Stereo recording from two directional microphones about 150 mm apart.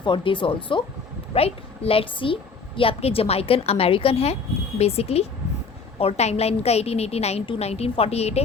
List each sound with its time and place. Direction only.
0.0 s a woman's voice: 35° left (ahead or behind)